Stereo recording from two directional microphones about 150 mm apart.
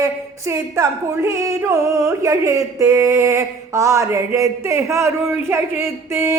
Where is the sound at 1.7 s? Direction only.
20° right (ahead or behind).